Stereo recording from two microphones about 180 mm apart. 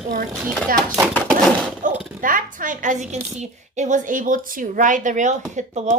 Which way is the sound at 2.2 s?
50° right (ahead or behind).